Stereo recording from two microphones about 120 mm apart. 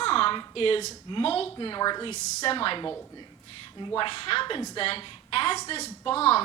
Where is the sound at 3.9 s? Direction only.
50° left (ahead or behind).